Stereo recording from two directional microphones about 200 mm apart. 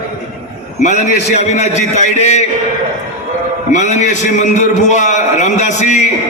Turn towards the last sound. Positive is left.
turn(degrees=35)  # may be behind; listen again after turning